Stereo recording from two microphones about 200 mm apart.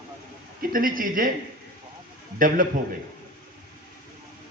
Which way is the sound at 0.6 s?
45° right (ahead or behind).